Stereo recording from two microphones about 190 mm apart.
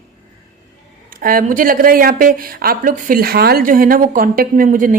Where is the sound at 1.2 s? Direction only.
45° right (ahead or behind).